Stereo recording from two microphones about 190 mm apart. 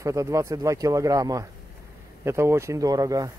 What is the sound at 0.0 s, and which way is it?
Speech, 15° right (ahead or behind).